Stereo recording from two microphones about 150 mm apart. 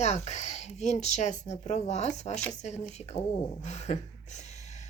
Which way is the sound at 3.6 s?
50° left (ahead or behind).